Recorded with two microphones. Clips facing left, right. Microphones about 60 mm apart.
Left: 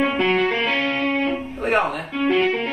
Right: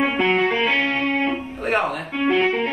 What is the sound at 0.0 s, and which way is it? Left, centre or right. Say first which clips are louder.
Music: even; centre.